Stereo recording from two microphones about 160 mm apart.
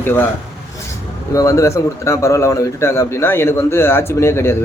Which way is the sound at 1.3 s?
20° left (ahead or behind).